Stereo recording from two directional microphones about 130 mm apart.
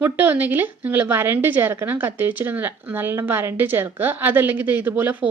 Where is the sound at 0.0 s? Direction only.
15° right (ahead or behind).